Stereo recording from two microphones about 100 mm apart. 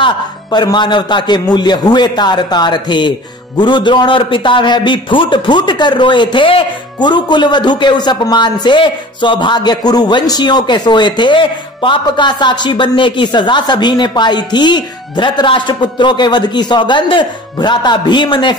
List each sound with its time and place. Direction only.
0.0 s a man's voice: 45° left (ahead or behind)